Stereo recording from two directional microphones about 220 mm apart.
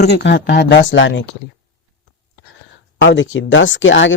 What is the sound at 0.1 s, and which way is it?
Speech, 50° left (ahead or behind).